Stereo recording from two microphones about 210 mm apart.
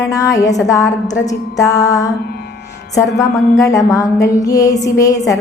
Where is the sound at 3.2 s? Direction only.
15° left (ahead or behind).